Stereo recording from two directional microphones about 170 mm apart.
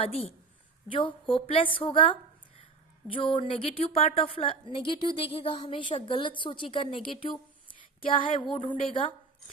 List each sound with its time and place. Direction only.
0.0 s a woman's voice: 35° left (ahead or behind)